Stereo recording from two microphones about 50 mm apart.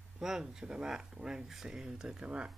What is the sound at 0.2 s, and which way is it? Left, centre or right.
Speech, centre.